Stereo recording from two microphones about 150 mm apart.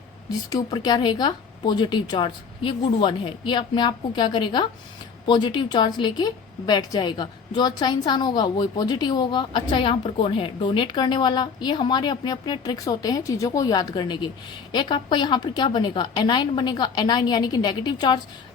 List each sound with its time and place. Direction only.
0.5 s a woman's voice: 25° left (ahead or behind)